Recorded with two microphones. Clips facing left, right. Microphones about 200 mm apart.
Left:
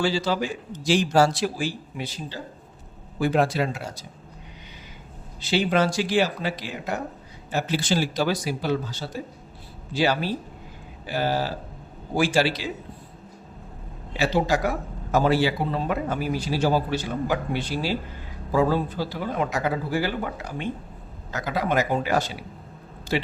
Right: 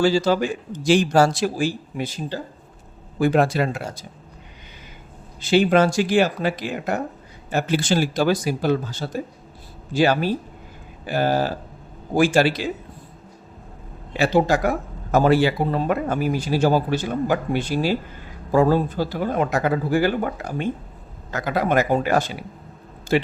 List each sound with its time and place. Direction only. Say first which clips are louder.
0.0 s speech: right 6 dB; 45° right (ahead or behind)
5.4 s speech: right 5 dB; 50° right (ahead or behind)
14.2 s speech: right 4 dB; 50° right (ahead or behind)